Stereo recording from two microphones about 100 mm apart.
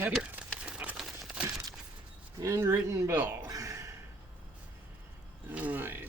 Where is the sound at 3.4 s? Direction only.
35° right (ahead or behind).